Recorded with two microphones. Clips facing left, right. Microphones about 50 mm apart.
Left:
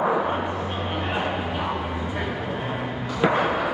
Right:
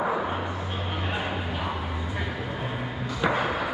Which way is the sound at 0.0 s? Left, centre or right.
Left.